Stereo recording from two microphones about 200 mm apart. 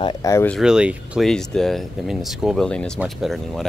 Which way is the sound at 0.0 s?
20° left (ahead or behind).